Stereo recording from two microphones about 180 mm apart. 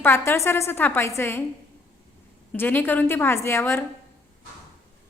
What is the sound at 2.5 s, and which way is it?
A woman's voice, 10° left (ahead or behind).